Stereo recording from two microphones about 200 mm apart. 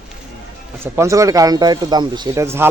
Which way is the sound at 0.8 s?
15° right (ahead or behind).